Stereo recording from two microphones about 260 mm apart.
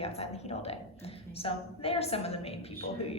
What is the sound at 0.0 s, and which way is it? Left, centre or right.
Speech, left.